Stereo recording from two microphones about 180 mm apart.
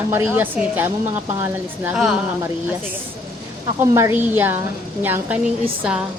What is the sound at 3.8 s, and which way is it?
A woman's voice, 15° right (ahead or behind).